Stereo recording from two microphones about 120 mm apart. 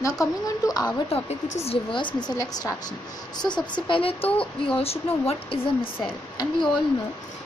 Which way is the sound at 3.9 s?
50° left (ahead or behind).